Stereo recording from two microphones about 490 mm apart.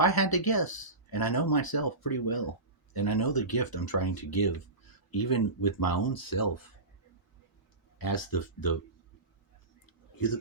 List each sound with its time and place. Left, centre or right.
0.0 s speech: left
7.9 s speech: left
9.8 s a sound: left